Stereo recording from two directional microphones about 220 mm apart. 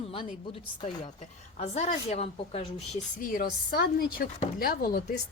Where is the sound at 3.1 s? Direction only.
40° left (ahead or behind).